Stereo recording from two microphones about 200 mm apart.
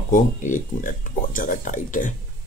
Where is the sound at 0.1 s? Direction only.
40° left (ahead or behind).